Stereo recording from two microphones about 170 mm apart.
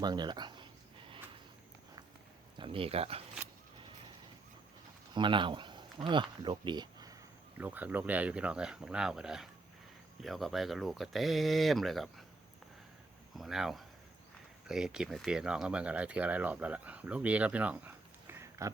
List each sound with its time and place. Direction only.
0.0 s a sound: 25° right (ahead or behind)
2.6 s speech: 30° right (ahead or behind)
5.1 s speech: 30° right (ahead or behind)
7.6 s speech: 10° right (ahead or behind)
13.3 s speech: centre (ahead or behind)